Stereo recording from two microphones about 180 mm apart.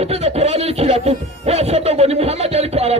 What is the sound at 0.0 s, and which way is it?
Music, 35° right (ahead or behind).